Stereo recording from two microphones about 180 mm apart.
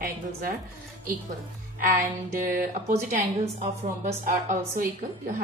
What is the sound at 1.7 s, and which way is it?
A woman's voice, 50° right (ahead or behind).